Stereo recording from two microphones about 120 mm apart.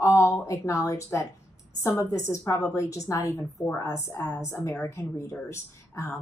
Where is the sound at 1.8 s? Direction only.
25° left (ahead or behind).